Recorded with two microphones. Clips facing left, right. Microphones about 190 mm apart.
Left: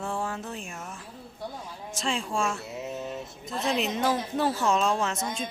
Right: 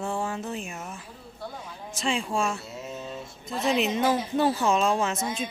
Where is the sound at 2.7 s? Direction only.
15° left (ahead or behind).